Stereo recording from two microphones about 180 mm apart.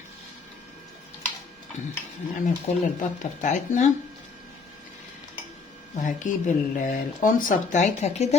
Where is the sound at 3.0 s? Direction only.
45° left (ahead or behind).